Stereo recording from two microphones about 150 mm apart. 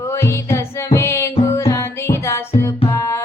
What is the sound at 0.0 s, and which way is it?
Music, 20° left (ahead or behind).